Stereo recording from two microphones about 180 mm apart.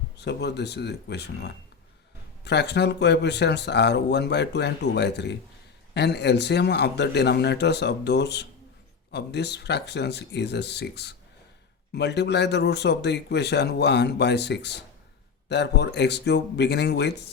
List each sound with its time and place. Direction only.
0.2 s speech: 70° left (ahead or behind)